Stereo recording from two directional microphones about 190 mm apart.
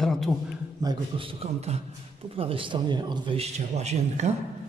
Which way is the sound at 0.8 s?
30° right (ahead or behind).